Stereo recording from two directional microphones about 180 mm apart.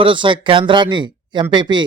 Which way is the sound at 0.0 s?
30° right (ahead or behind).